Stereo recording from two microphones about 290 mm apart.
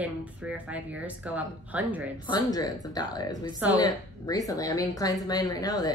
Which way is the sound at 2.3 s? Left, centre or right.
Centre.